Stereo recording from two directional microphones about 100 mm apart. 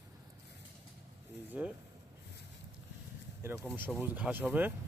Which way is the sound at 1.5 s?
15° right (ahead or behind).